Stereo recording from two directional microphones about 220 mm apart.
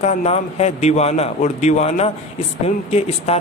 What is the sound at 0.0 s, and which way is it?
A man's voice, 30° left (ahead or behind).